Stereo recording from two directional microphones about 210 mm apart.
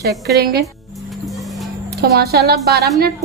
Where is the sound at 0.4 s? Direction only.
50° right (ahead or behind).